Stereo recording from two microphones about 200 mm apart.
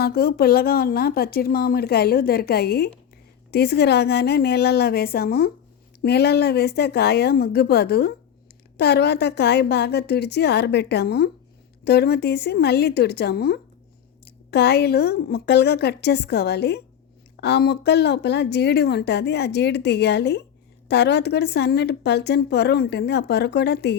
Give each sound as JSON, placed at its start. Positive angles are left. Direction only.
{"t": 0.0, "sound": "a woman's voice", "side_deg": 50}